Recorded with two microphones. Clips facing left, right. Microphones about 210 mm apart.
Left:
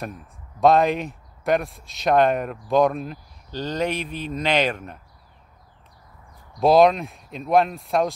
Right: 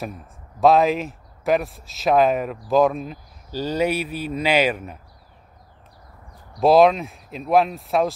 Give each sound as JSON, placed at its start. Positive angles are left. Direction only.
{"t": 0.0, "sound": "speech", "side_deg": 0}
{"t": 6.6, "sound": "speech", "side_deg": 0}